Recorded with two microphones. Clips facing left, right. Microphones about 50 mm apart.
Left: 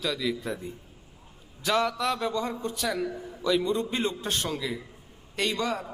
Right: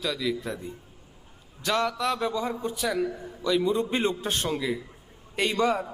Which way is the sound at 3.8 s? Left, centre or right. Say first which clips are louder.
Right 3 dB; centre.